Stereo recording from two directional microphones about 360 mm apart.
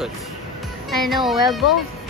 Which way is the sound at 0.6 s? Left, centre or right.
Centre.